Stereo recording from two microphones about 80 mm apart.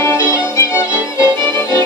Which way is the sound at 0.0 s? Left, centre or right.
Left.